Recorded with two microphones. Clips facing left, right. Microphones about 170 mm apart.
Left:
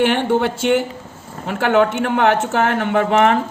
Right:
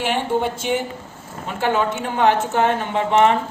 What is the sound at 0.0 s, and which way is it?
Speech, 65° left (ahead or behind).